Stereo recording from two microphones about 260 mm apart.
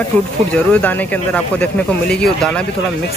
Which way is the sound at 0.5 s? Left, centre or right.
Centre.